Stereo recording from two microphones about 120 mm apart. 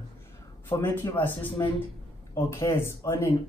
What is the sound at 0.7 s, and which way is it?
Speech, 20° left (ahead or behind).